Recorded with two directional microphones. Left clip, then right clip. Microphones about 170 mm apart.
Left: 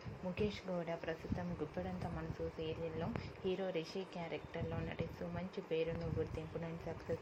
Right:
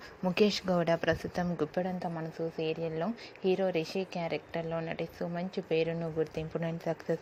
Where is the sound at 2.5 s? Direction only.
40° right (ahead or behind).